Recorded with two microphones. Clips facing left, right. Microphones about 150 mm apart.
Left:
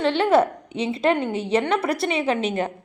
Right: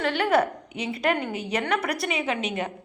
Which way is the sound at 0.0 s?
25° left (ahead or behind).